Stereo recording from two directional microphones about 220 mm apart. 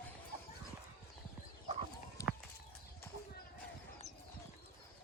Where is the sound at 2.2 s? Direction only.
15° left (ahead or behind).